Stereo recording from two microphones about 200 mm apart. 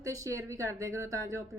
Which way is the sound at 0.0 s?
15° right (ahead or behind).